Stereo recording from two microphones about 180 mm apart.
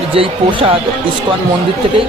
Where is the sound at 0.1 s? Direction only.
30° right (ahead or behind).